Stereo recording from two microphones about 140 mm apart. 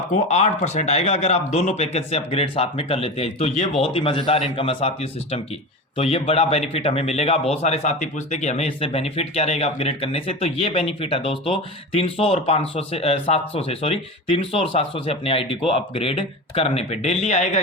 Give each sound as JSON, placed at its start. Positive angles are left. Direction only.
{"t": 0.1, "sound": "speech", "side_deg": 55}